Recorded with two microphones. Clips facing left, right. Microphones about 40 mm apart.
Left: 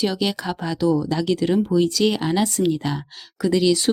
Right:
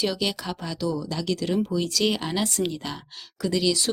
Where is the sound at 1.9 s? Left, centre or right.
Centre.